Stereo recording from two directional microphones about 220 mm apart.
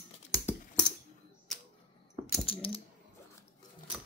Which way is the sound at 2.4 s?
25° left (ahead or behind).